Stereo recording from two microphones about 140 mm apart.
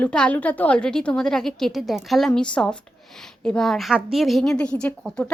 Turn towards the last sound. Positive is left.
turn(degrees=5)  # may be behind; listen again after turning